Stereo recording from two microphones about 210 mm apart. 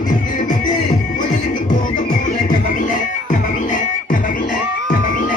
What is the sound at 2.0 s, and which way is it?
Music, 35° left (ahead or behind).